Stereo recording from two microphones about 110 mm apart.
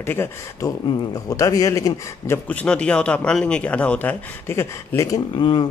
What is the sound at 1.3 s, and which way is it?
Speech, 30° left (ahead or behind).